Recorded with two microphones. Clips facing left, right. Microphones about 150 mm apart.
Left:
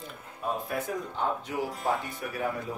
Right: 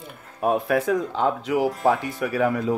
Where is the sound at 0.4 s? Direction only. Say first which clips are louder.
Right 11 dB; 75° right (ahead or behind).